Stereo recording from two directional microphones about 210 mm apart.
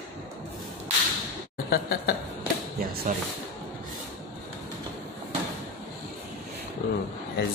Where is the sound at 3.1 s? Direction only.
40° right (ahead or behind).